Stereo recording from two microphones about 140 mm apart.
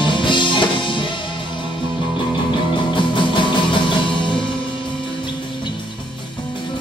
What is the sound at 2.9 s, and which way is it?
Music, 35° left (ahead or behind).